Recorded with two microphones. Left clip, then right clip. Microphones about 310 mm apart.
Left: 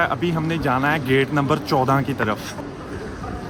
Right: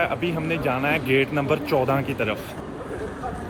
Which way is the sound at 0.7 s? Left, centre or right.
Left.